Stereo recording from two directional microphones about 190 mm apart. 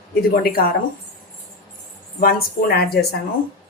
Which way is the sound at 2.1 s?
50° left (ahead or behind).